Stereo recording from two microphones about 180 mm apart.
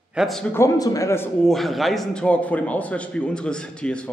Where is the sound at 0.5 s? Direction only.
15° left (ahead or behind).